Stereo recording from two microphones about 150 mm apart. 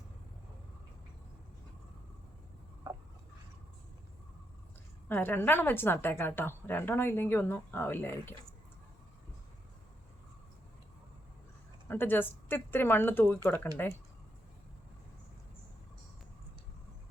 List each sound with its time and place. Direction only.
2.8 s a sound: 25° right (ahead or behind)
5.0 s a woman's voice: 10° left (ahead or behind)
11.9 s a woman's voice: 15° left (ahead or behind)